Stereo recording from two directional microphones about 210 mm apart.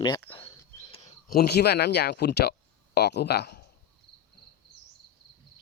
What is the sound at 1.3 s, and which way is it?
Speech, 45° left (ahead or behind).